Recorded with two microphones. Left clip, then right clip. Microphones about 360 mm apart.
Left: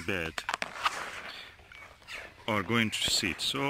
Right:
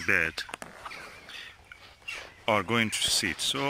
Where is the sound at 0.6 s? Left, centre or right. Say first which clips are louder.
Left 10 dB; left.